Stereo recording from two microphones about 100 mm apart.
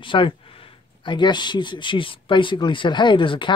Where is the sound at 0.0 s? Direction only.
55° left (ahead or behind).